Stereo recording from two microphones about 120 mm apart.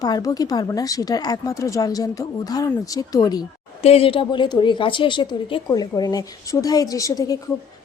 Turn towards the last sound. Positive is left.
turn(degrees=30)  # may be behind; listen again after turning